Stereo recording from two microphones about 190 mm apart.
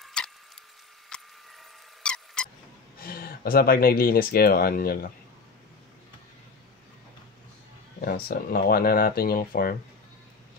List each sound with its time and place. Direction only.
0.0 s a sound: 5° left (ahead or behind)
3.0 s speech: 50° left (ahead or behind)
8.0 s speech: 55° left (ahead or behind)